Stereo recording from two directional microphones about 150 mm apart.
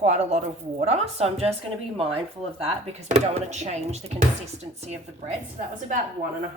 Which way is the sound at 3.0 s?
50° right (ahead or behind).